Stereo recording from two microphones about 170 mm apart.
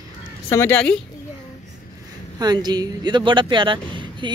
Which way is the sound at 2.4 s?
25° right (ahead or behind).